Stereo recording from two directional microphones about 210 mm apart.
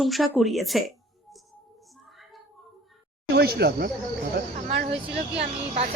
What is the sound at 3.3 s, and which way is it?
Speech, 50° right (ahead or behind).